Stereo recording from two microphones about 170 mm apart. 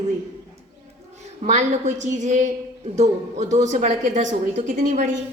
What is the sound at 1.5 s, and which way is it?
A woman's voice, 45° right (ahead or behind).